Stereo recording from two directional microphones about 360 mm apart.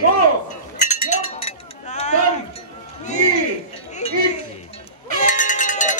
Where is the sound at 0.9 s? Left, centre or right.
Centre.